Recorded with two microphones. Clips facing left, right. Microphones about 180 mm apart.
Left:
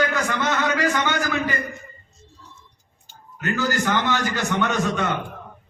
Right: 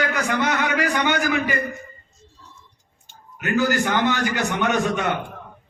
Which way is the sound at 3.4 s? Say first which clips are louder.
Right 3 dB; 20° right (ahead or behind).